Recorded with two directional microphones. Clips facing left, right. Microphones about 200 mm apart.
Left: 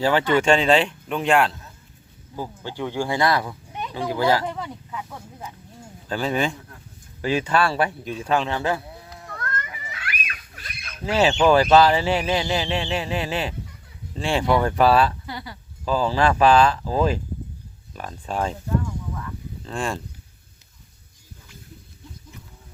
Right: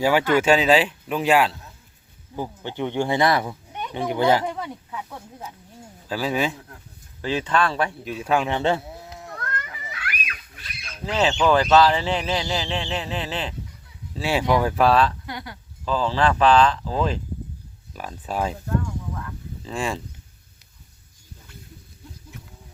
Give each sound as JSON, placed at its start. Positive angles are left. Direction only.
{"t": 0.0, "sound": "speech", "side_deg": -10}
{"t": 2.3, "sound": "speech", "side_deg": -20}
{"t": 4.5, "sound": "speech", "side_deg": -5}
{"t": 7.2, "sound": "speech", "side_deg": 10}
{"t": 8.1, "sound": "speech", "side_deg": -10}
{"t": 8.5, "sound": "speech", "side_deg": -25}
{"t": 9.1, "sound": "a sound", "side_deg": -5}
{"t": 11.0, "sound": "speech", "side_deg": 10}
{"t": 14.1, "sound": "speech", "side_deg": -5}
{"t": 17.9, "sound": "speech", "side_deg": -5}
{"t": 19.1, "sound": "a sound", "side_deg": 0}